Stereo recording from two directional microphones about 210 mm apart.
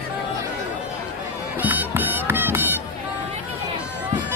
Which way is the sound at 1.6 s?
10° right (ahead or behind).